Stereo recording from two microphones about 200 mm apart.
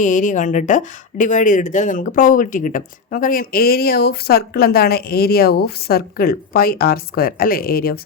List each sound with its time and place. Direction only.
0.0 s speech: 40° left (ahead or behind)